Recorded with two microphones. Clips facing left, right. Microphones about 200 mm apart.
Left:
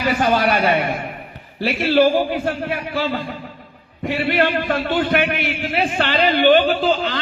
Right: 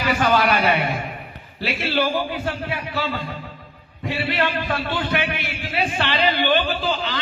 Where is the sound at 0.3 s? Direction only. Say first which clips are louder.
Left 2 dB; 45° left (ahead or behind).